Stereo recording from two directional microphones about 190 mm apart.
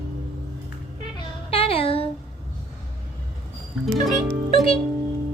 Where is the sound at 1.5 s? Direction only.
30° left (ahead or behind).